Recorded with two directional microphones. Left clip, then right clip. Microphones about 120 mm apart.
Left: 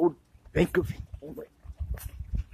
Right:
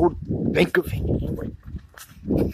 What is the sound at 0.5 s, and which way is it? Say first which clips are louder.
Speech: right 6 dB; 25° right (ahead or behind).